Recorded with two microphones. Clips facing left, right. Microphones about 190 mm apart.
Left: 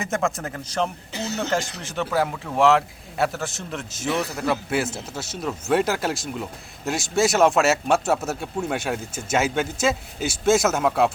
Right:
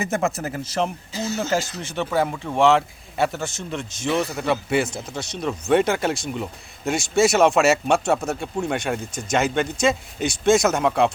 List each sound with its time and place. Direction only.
0.0 s a man's voice: 5° right (ahead or behind)
1.1 s speech: 65° left (ahead or behind)
1.4 s a man's voice: centre (ahead or behind)